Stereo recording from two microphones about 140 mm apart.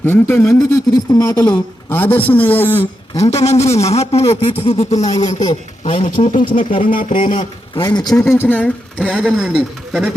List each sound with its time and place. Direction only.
0.0 s speech: 15° left (ahead or behind)
3.3 s speech: 45° left (ahead or behind)
6.5 s a sound: 70° left (ahead or behind)
7.3 s a man's voice: 35° left (ahead or behind)
8.1 s speech: 20° left (ahead or behind); by 10.1 s centre (ahead or behind)